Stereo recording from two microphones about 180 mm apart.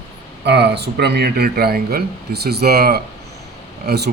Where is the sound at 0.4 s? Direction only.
65° right (ahead or behind).